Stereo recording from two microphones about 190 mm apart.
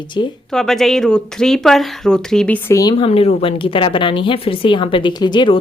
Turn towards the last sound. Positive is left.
turn(degrees=25)  # may be behind; listen again after turning